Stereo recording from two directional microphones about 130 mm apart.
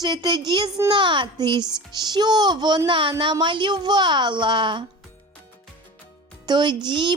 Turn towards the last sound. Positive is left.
turn(degrees=-35)  # may be behind; listen again after turning